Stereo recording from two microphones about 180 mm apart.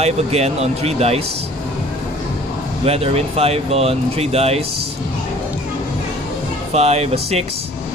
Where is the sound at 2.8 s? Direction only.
35° right (ahead or behind).